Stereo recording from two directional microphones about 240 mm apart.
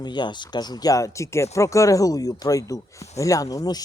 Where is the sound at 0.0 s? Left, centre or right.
Centre.